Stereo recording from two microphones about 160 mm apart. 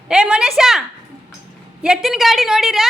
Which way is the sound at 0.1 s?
5° right (ahead or behind).